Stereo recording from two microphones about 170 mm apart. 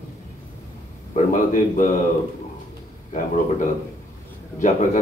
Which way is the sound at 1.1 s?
50° left (ahead or behind).